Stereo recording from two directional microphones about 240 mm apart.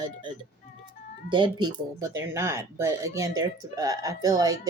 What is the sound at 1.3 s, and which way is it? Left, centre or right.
Speech, centre.